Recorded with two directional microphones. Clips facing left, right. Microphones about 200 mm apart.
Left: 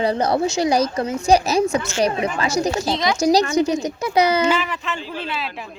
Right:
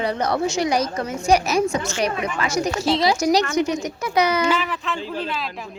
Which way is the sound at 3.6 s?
30° left (ahead or behind).